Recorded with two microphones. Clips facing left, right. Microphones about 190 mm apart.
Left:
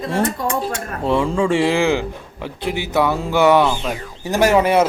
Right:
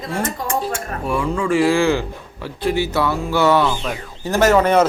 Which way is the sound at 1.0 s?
25° left (ahead or behind).